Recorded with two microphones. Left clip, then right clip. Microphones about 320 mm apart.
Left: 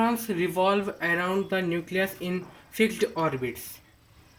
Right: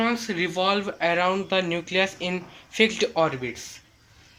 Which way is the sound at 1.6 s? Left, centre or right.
Right.